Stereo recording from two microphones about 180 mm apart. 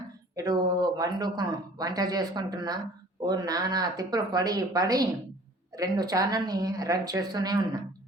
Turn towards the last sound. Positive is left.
turn(degrees=-20)  # may be behind; listen again after turning